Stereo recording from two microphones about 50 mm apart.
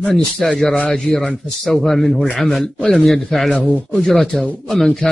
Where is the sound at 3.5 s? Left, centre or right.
Left.